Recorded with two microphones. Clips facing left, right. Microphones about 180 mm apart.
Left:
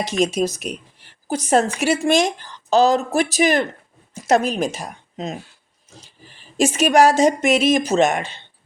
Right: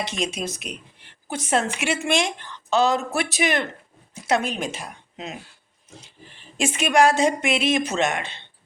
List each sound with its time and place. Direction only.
0.0 s a woman's voice: 45° left (ahead or behind)
6.6 s a woman's voice: 40° left (ahead or behind)